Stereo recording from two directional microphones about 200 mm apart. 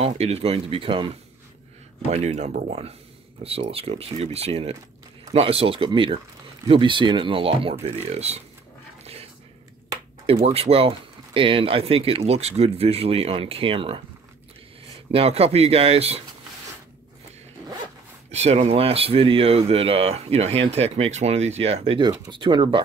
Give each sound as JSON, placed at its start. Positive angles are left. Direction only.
{"t": 0.0, "sound": "speech", "side_deg": -30}
{"t": 2.1, "sound": "speech", "side_deg": -35}
{"t": 9.0, "sound": "a sound", "side_deg": -30}
{"t": 10.2, "sound": "speech", "side_deg": -30}
{"t": 15.0, "sound": "speech", "side_deg": -30}
{"t": 18.3, "sound": "speech", "side_deg": -35}